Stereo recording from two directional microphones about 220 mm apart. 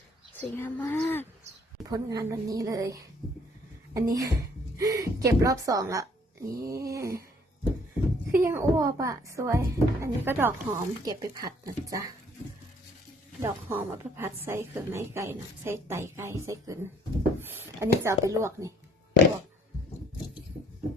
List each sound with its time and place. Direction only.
0.5 s speech: 10° left (ahead or behind)
1.9 s a woman's voice: 15° right (ahead or behind)
6.5 s a sound: 15° right (ahead or behind)
8.3 s a woman's voice: 10° right (ahead or behind)
13.4 s a woman's voice: 10° right (ahead or behind)